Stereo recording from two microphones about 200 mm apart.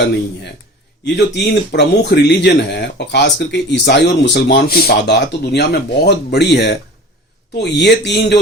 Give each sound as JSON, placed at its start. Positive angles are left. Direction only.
{"t": 1.0, "sound": "speech", "side_deg": 60}